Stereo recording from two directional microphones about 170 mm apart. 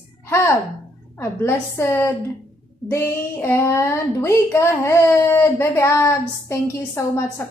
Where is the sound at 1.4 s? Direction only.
15° left (ahead or behind).